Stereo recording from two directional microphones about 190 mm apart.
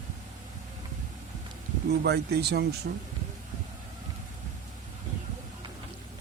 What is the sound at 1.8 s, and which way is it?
Speech, 60° right (ahead or behind).